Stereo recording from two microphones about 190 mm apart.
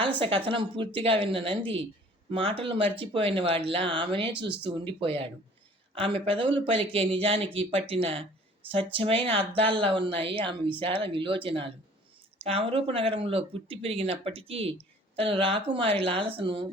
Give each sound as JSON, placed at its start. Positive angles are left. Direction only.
{"t": 0.2, "sound": "speech", "side_deg": -25}